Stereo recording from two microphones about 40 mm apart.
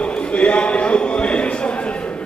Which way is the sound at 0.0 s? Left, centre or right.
Left.